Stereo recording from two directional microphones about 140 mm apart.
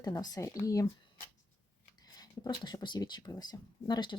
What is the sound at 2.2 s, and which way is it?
Speech, 30° left (ahead or behind).